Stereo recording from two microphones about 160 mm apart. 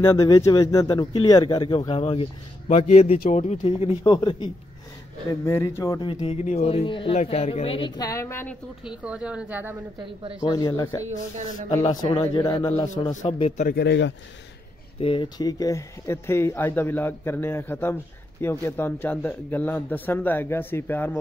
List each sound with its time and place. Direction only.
0.0 s speech: 15° left (ahead or behind)
5.4 s speech: 15° left (ahead or behind)
6.0 s speech: 35° left (ahead or behind); by 8.5 s 15° left (ahead or behind)
8.8 s speech: 5° right (ahead or behind)
10.5 s speech: 25° left (ahead or behind)
13.1 s a man's voice: 45° left (ahead or behind)
13.7 s speech: 90° left
15.0 s speech: 35° left (ahead or behind); by 21.2 s 10° left (ahead or behind)